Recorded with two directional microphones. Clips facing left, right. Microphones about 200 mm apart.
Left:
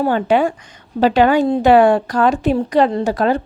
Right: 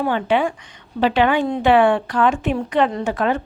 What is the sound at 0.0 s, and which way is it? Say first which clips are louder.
A woman's voice: left 4 dB; 40° left (ahead or behind).